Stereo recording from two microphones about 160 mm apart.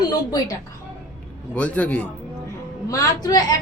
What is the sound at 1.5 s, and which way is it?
Speech, 10° left (ahead or behind).